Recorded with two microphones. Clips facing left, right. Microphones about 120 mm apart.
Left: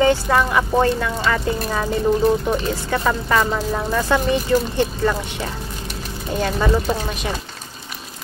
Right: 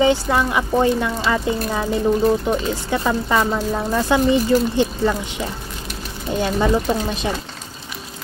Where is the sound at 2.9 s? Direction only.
15° right (ahead or behind).